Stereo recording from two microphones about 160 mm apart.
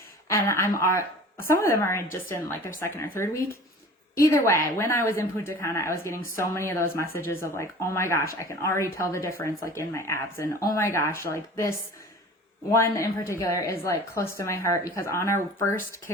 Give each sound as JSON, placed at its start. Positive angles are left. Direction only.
{"t": 0.3, "sound": "a woman's voice", "side_deg": 15}
{"t": 12.7, "sound": "a woman's voice", "side_deg": 20}